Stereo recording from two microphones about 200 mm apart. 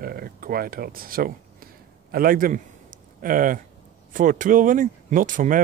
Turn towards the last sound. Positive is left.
turn(degrees=-40)  # may be behind; listen again after turning